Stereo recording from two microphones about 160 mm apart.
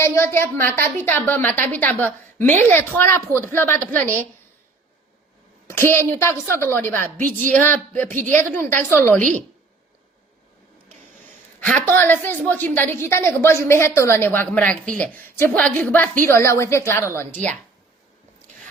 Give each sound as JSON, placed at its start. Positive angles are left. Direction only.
{"t": 0.0, "sound": "a woman's voice", "side_deg": 15}
{"t": 5.6, "sound": "a woman's voice", "side_deg": 15}
{"t": 11.6, "sound": "a woman's voice", "side_deg": 10}